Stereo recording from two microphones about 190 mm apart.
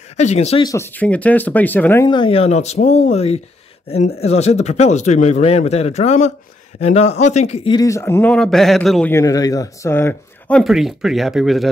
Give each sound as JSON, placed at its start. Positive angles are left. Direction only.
{"t": 0.2, "sound": "speech", "side_deg": 35}
{"t": 0.7, "sound": "speech", "side_deg": 15}
{"t": 2.0, "sound": "speech", "side_deg": 25}
{"t": 7.7, "sound": "a man's voice", "side_deg": 15}
{"t": 9.1, "sound": "speech", "side_deg": 20}
{"t": 10.6, "sound": "a man's voice", "side_deg": 0}